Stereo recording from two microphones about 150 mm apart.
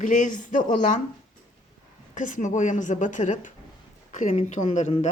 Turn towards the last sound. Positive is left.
turn(degrees=55)  # may be behind; listen again after turning